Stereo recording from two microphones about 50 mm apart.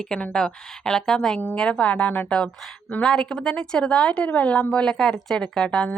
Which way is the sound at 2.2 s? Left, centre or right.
Centre.